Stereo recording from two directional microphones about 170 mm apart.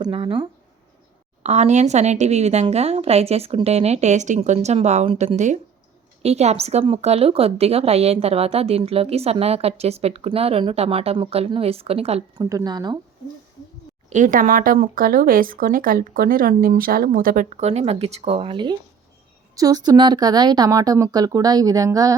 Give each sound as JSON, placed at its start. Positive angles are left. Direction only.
{"t": 0.0, "sound": "speech", "side_deg": -30}
{"t": 1.4, "sound": "a woman's voice", "side_deg": -40}
{"t": 12.4, "sound": "speech", "side_deg": -20}
{"t": 14.1, "sound": "speech", "side_deg": -50}